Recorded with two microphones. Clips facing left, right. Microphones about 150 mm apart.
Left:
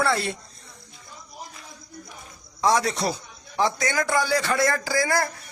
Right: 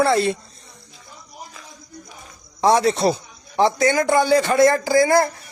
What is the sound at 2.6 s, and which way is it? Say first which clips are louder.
A man's voice: right 6 dB; 25° right (ahead or behind).